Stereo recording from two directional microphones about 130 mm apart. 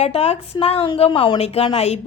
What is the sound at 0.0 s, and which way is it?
A woman's voice, 55° left (ahead or behind).